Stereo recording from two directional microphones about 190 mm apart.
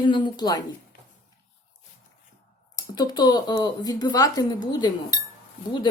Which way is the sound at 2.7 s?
20° left (ahead or behind).